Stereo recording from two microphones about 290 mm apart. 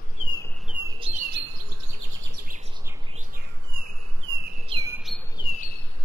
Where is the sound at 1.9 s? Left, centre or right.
Right.